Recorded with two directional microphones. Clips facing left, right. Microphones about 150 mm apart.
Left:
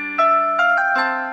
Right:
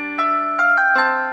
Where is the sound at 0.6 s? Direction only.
60° right (ahead or behind).